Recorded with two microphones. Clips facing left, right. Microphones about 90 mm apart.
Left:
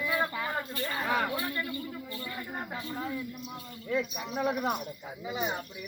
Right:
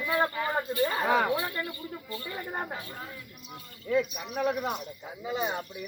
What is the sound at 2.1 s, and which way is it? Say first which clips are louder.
Speech: right 2 dB; 35° right (ahead or behind).